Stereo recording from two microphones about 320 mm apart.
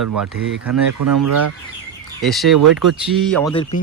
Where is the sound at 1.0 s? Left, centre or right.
Right.